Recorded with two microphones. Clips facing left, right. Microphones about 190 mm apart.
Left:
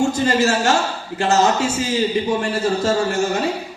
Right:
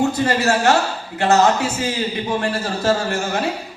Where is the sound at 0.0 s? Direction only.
60° right (ahead or behind).